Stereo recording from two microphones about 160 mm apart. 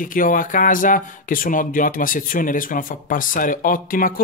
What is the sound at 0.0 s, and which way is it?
Speech, 60° left (ahead or behind).